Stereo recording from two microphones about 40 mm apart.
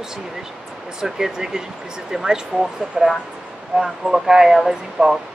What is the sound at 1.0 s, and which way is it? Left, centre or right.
Speech, centre.